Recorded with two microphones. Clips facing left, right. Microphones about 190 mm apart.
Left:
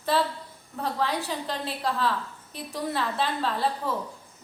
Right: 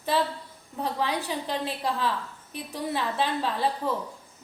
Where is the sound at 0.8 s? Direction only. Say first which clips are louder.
Even; 15° right (ahead or behind).